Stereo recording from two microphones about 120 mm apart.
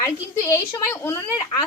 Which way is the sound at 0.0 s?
25° left (ahead or behind).